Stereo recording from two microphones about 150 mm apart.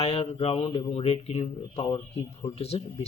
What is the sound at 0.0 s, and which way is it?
Speech, 45° left (ahead or behind).